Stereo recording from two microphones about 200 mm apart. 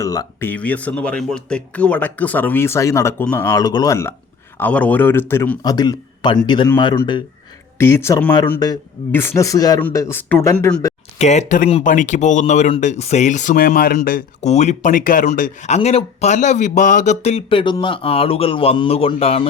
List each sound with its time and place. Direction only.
0.0 s speech: 15° left (ahead or behind)
11.2 s speech: 35° left (ahead or behind)